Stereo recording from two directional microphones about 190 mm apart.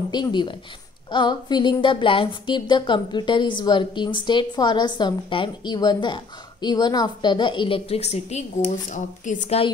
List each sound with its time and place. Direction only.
0.1 s a woman's voice: 25° left (ahead or behind)